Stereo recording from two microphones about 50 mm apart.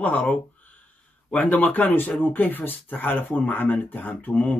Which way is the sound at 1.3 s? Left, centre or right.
Left.